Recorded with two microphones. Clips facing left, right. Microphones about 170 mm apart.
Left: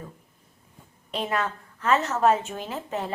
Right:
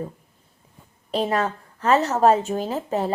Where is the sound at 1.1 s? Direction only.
35° right (ahead or behind).